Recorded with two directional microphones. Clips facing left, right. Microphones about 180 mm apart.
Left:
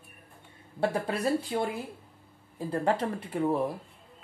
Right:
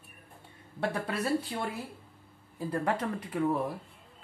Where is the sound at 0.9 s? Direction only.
30° left (ahead or behind).